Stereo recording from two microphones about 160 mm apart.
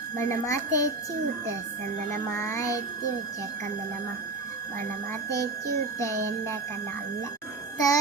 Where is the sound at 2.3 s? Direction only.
20° left (ahead or behind).